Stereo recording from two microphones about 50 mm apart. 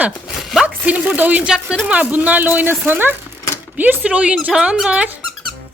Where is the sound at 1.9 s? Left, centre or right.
Right.